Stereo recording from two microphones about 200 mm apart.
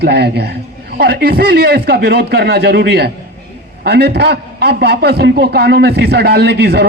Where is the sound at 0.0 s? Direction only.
55° right (ahead or behind).